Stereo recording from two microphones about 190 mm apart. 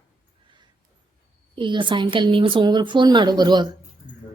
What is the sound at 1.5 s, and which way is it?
Speech, 25° right (ahead or behind).